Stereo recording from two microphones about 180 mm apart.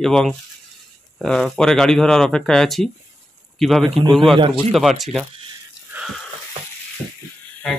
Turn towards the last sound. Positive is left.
turn(degrees=5)  # may be behind; listen again after turning